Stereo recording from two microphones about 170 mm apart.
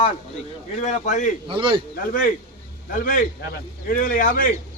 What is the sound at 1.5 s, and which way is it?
Speech, 30° right (ahead or behind).